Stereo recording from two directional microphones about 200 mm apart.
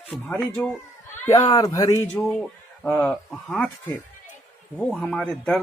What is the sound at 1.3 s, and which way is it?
Speech, 20° left (ahead or behind).